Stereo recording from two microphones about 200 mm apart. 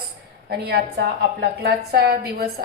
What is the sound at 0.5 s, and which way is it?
A woman's voice, 50° right (ahead or behind).